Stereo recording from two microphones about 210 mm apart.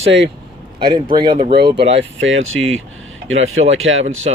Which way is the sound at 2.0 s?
65° right (ahead or behind).